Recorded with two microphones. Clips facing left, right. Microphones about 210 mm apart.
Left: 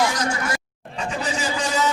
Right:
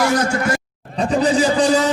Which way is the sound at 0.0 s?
60° right (ahead or behind).